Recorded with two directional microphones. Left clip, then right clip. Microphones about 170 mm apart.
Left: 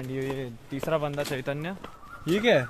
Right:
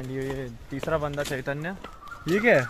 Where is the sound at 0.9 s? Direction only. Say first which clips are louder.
Right 1 dB; 25° right (ahead or behind).